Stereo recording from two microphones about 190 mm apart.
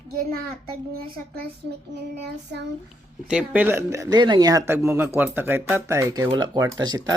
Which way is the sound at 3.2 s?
5° right (ahead or behind).